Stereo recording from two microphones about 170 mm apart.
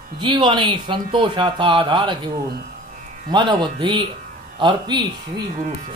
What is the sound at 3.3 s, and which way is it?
A man's voice, 25° right (ahead or behind).